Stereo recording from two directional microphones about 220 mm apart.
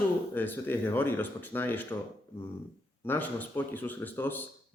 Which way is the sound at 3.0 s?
10° left (ahead or behind).